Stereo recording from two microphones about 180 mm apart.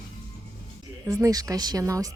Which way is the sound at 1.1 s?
20° right (ahead or behind).